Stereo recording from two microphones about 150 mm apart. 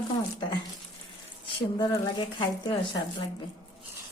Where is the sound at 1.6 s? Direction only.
25° left (ahead or behind).